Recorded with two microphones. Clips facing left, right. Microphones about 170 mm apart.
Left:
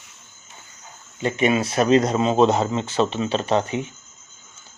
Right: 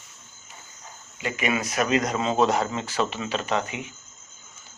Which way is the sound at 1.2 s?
30° left (ahead or behind).